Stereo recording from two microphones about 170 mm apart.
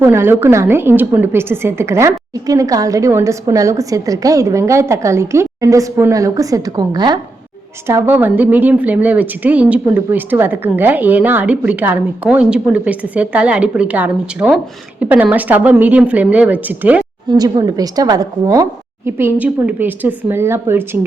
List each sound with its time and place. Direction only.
0.0 s a woman's voice: 15° right (ahead or behind)
7.9 s a woman's voice: 10° right (ahead or behind)
17.2 s a woman's voice: 20° right (ahead or behind)